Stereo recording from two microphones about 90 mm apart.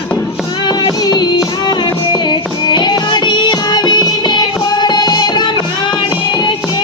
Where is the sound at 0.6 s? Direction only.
50° left (ahead or behind).